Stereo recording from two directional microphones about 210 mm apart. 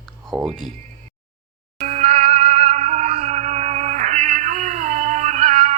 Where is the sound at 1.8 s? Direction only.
35° right (ahead or behind).